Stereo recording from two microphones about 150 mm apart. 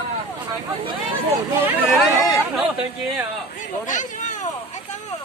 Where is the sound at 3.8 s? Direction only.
55° left (ahead or behind).